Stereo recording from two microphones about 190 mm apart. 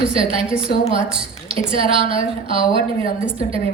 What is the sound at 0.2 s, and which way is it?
Speech, 30° right (ahead or behind).